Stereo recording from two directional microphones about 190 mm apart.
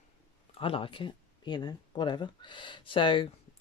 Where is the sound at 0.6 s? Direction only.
30° left (ahead or behind).